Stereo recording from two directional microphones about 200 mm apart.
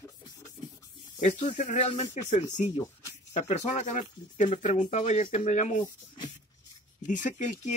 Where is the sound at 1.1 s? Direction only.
40° left (ahead or behind).